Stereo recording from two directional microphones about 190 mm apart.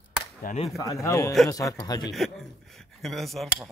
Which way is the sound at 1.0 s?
15° left (ahead or behind).